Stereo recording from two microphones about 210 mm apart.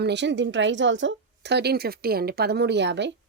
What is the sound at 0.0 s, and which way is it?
Speech, 55° right (ahead or behind).